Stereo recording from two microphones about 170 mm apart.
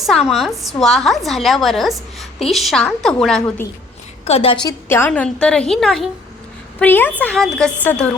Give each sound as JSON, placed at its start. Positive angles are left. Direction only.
{"t": 0.0, "sound": "a woman's voice", "side_deg": 0}
{"t": 4.3, "sound": "a woman's voice", "side_deg": 35}
{"t": 4.9, "sound": "a woman's voice", "side_deg": 15}